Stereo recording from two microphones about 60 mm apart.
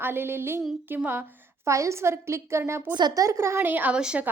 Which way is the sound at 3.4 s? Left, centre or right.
Right.